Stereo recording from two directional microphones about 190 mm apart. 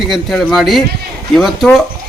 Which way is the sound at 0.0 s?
Centre (ahead or behind).